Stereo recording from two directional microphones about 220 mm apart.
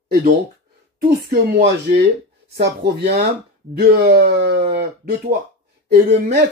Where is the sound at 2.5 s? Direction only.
50° right (ahead or behind).